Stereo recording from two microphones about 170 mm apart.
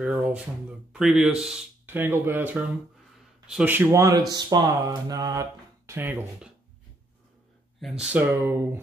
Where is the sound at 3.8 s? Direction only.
20° right (ahead or behind).